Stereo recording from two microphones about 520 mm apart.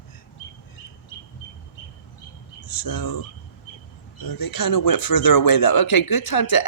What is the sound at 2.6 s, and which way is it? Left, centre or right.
Speech, left.